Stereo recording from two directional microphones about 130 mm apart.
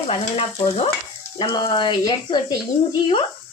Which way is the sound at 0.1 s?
50° left (ahead or behind).